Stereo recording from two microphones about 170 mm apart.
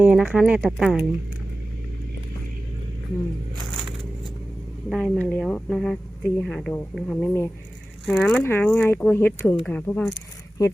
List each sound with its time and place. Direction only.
0.0 s speech: 5° right (ahead or behind)
4.9 s speech: 5° left (ahead or behind)